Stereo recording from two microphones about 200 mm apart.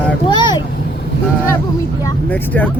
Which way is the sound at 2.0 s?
10° left (ahead or behind).